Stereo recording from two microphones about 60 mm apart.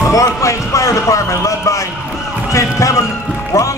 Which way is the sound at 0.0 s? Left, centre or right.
Left.